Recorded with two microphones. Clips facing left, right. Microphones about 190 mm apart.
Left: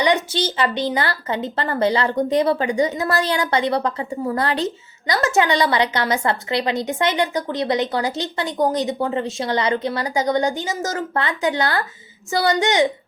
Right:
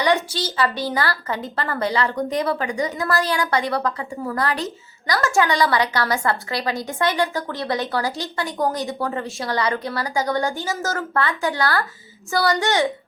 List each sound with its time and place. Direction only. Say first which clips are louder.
0.0 s a woman's voice: left 2 dB; 20° left (ahead or behind)